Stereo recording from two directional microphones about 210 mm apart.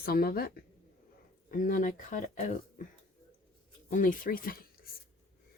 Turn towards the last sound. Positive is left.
turn(degrees=45)  # may be behind; listen again after turning